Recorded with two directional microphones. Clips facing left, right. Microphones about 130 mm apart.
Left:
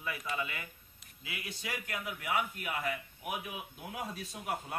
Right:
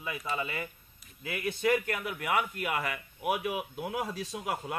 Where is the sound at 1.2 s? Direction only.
50° right (ahead or behind).